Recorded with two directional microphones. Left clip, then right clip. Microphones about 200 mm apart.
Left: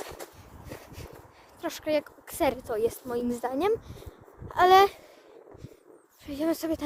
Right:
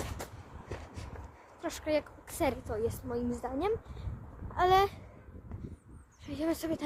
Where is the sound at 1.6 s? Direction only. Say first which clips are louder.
Left 4 dB; 30° left (ahead or behind).